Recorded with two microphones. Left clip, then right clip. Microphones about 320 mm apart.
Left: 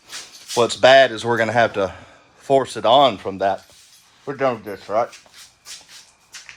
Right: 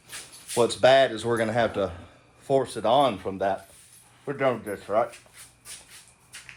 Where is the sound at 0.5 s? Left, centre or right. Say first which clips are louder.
Left 7 dB; left.